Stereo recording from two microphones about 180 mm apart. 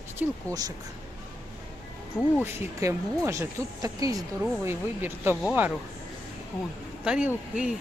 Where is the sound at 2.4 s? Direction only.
10° right (ahead or behind).